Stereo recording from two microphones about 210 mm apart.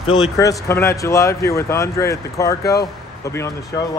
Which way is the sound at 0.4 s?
15° left (ahead or behind).